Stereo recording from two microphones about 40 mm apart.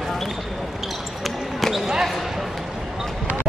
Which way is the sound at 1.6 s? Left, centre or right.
Centre.